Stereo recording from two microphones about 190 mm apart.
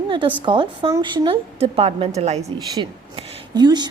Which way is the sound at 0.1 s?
25° right (ahead or behind).